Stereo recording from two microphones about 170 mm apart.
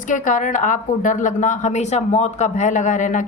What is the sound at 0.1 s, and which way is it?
Speech, 50° left (ahead or behind).